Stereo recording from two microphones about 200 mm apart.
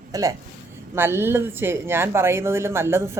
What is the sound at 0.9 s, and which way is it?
Speech, 10° right (ahead or behind).